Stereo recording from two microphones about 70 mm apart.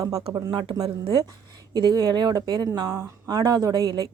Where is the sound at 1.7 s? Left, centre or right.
Right.